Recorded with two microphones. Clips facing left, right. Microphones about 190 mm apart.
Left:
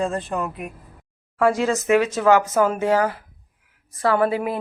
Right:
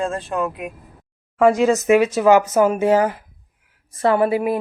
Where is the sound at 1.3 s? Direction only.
20° right (ahead or behind).